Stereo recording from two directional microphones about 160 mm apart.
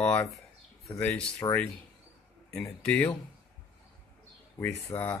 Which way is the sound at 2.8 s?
5° left (ahead or behind).